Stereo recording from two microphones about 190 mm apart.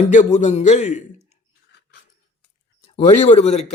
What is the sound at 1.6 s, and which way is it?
Dog, 60° left (ahead or behind).